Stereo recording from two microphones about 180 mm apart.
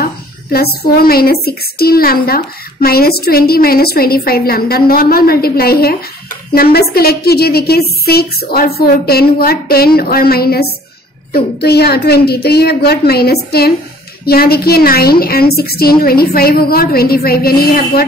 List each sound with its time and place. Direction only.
0.0 s a woman's voice: 60° left (ahead or behind)